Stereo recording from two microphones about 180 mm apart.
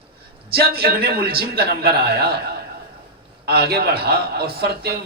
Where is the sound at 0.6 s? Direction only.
60° right (ahead or behind).